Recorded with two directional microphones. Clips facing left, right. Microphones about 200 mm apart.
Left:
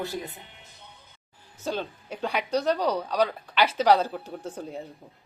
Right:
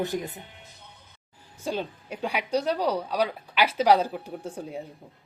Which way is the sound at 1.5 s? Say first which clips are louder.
Right 1 dB; 10° right (ahead or behind).